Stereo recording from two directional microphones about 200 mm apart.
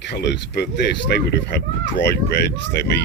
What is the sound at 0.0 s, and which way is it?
Speech, 60° left (ahead or behind).